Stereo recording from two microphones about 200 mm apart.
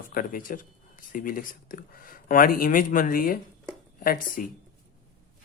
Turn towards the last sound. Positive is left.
turn(degrees=45)  # may be behind; listen again after turning